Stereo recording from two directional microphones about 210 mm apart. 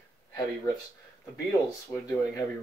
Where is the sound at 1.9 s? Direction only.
15° left (ahead or behind).